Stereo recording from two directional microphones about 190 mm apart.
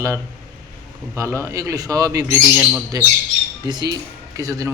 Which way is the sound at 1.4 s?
15° right (ahead or behind).